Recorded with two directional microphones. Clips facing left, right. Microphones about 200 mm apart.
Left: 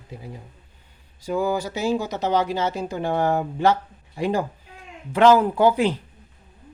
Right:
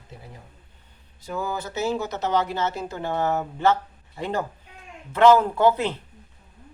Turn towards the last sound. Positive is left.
turn(degrees=10)  # may be behind; listen again after turning